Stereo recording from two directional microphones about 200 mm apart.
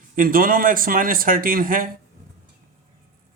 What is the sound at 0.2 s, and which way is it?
Speech, 45° right (ahead or behind).